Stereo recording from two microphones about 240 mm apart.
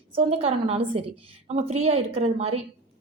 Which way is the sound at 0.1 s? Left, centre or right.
Right.